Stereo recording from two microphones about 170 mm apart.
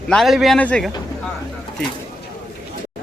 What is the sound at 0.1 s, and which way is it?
Speech, centre (ahead or behind).